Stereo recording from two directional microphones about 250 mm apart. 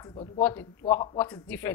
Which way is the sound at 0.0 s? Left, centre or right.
Left.